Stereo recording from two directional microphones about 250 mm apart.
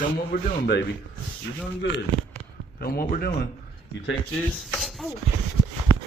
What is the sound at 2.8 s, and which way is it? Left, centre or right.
Speech, left.